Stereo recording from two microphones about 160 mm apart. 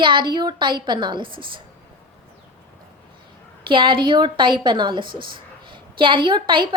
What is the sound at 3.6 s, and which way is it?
A woman's voice, 30° right (ahead or behind).